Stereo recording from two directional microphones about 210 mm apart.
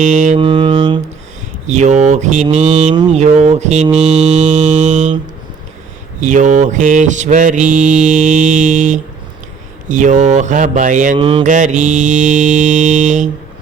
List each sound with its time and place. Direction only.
0.0 s mantra: 35° right (ahead or behind)
0.3 s mantra: 25° right (ahead or behind)
1.6 s mantra: 35° right (ahead or behind)
6.1 s mantra: 35° right (ahead or behind)
11.2 s mantra: 25° right (ahead or behind)
11.4 s mantra: 35° right (ahead or behind)